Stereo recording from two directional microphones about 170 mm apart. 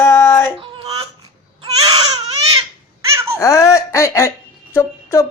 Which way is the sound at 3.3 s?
20° left (ahead or behind).